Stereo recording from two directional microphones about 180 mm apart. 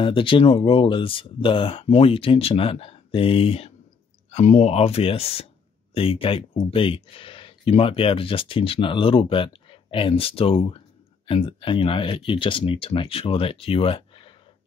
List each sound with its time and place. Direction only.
0.0 s speech: 30° left (ahead or behind)